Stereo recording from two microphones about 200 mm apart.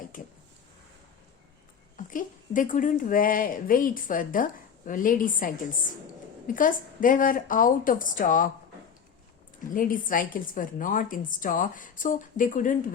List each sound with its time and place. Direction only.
0.1 s a sound: 40° left (ahead or behind)
2.0 s a woman's voice: 40° left (ahead or behind)
6.5 s a woman's voice: 40° left (ahead or behind)
9.7 s a woman's voice: 45° left (ahead or behind)